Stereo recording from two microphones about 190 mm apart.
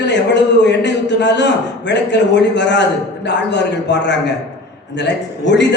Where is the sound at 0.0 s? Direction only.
65° left (ahead or behind).